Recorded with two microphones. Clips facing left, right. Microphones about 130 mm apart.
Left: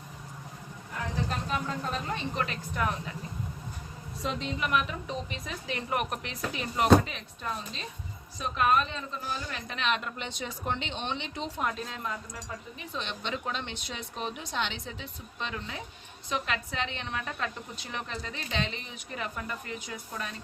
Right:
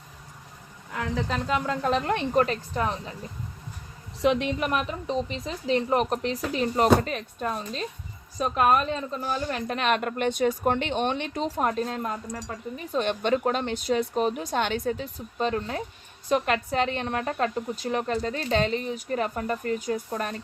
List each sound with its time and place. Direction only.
1.1 s speech: 90° right; by 2.2 s 70° right (ahead or behind)
2.3 s speech: 40° right (ahead or behind)
4.2 s a woman's voice: 70° right (ahead or behind)
4.6 s speech: 40° right (ahead or behind)